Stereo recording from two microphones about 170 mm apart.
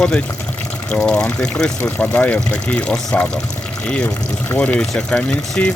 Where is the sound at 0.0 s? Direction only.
5° left (ahead or behind).